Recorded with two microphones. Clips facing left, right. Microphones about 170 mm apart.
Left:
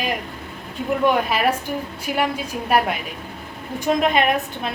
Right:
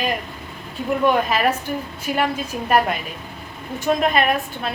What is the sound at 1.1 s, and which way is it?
Speech, 10° left (ahead or behind).